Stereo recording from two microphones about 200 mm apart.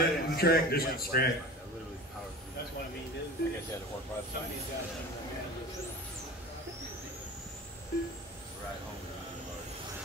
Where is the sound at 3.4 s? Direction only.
50° left (ahead or behind).